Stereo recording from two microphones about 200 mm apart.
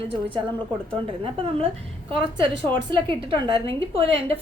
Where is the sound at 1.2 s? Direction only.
30° right (ahead or behind).